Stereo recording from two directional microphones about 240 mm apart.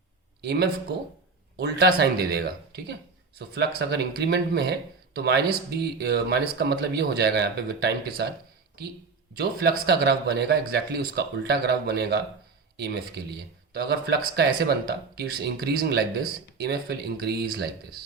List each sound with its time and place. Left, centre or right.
0.4 s speech: right
9.4 s speech: right
14.3 s speech: right